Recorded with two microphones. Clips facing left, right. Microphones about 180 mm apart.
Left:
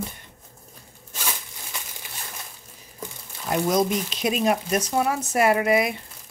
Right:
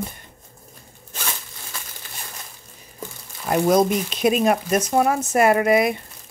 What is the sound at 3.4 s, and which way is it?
Speech, 55° right (ahead or behind).